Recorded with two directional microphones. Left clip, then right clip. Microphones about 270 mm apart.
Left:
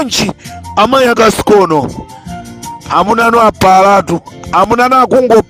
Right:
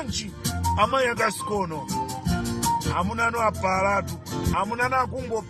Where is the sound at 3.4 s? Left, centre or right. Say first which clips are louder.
Left 18 dB; left.